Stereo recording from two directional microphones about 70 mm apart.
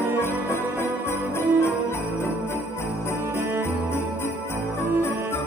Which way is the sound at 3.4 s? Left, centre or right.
Right.